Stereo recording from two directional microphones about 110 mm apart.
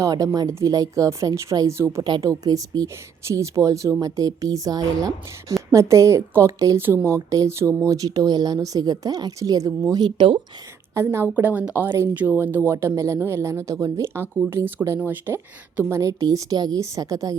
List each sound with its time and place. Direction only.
0.0 s speech: 30° right (ahead or behind)
10.9 s speech: 25° right (ahead or behind)
16.0 s speech: 30° right (ahead or behind)